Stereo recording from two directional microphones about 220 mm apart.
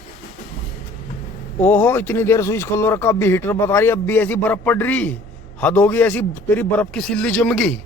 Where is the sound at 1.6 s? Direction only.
10° left (ahead or behind).